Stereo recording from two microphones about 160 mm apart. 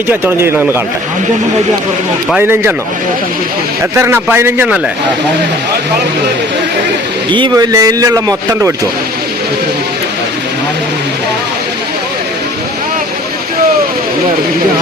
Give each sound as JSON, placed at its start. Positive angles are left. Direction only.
{"t": 0.1, "sound": "a man's voice", "side_deg": -15}
{"t": 2.4, "sound": "a man's voice", "side_deg": -15}
{"t": 3.9, "sound": "a man's voice", "side_deg": -15}
{"t": 7.3, "sound": "a man's voice", "side_deg": -25}